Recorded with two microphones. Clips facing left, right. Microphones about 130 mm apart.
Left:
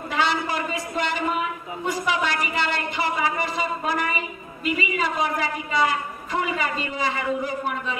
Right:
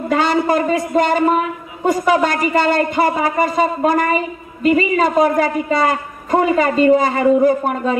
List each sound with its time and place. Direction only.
0.1 s a woman's voice: 45° right (ahead or behind)